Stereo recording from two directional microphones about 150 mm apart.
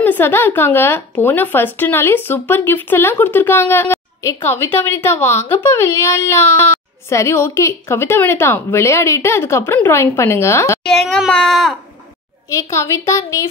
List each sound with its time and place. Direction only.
0.0 s speech: 15° left (ahead or behind)
10.8 s a child's voice: 5° left (ahead or behind)
12.4 s speech: 20° left (ahead or behind)